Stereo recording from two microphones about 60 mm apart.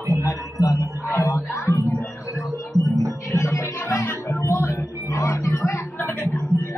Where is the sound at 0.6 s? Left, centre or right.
Left.